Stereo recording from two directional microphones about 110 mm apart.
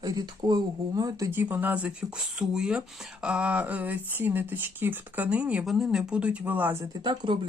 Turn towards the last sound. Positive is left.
turn(degrees=-45)  # may be behind; listen again after turning